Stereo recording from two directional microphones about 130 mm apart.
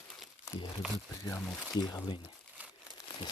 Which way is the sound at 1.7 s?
30° left (ahead or behind).